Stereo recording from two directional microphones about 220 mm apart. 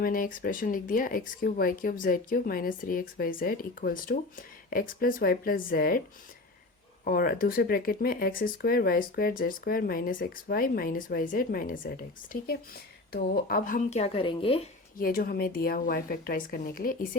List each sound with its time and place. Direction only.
0.0 s speech: 40° left (ahead or behind)
7.0 s speech: 40° left (ahead or behind); by 14.7 s 25° left (ahead or behind)
14.9 s speech: 40° left (ahead or behind)